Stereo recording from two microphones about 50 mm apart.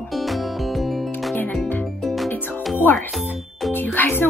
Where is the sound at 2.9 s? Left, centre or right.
Left.